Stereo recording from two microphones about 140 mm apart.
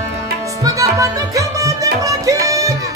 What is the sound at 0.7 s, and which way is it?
Music, 25° right (ahead or behind).